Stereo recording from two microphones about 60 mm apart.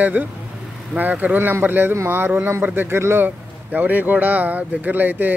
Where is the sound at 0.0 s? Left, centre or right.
Right.